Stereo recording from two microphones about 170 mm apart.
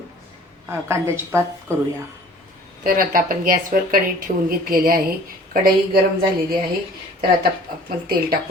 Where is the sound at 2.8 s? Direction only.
55° right (ahead or behind).